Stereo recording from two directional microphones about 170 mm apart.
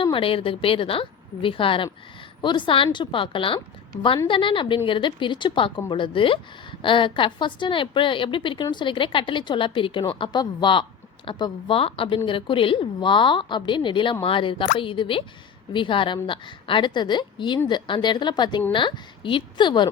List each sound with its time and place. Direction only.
0.0 s a woman's voice: 30° left (ahead or behind)